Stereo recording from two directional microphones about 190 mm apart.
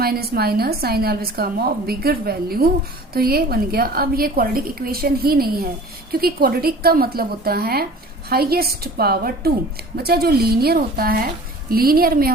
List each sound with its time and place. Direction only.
0.0 s a woman's voice: 55° right (ahead or behind)